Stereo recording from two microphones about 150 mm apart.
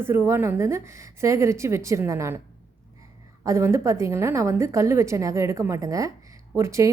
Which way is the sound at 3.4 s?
20° right (ahead or behind).